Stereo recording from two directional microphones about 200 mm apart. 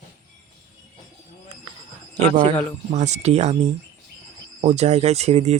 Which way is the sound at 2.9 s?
35° right (ahead or behind).